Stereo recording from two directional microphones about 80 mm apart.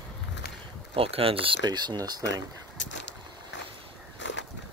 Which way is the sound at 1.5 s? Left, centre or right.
Right.